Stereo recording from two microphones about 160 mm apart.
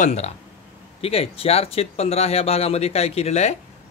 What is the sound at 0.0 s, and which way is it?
Speech, 45° left (ahead or behind).